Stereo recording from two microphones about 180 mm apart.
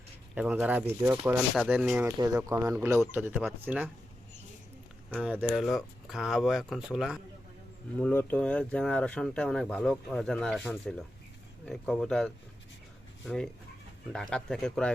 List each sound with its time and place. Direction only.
0.3 s speech: 5° right (ahead or behind)
1.5 s speech: 5° right (ahead or behind)
2.0 s speech: 20° right (ahead or behind)
5.2 s speech: 5° right (ahead or behind)
7.9 s speech: 10° left (ahead or behind)